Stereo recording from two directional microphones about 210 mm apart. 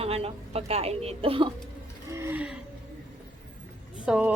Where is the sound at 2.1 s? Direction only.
10° right (ahead or behind).